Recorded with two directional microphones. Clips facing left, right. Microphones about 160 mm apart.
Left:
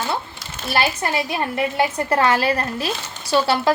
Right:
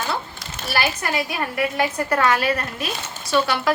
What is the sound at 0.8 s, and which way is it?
A woman's voice, 25° left (ahead or behind).